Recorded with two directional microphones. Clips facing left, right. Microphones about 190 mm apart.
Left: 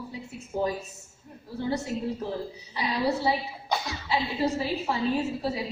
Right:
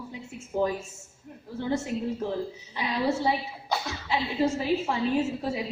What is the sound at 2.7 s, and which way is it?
A woman's voice, 35° left (ahead or behind).